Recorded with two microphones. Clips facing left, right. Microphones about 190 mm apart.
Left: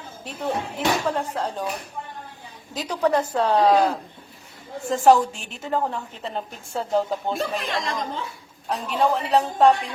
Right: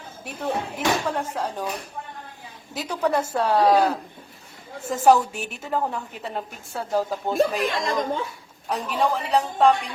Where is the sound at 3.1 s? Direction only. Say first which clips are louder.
Even; 10° right (ahead or behind).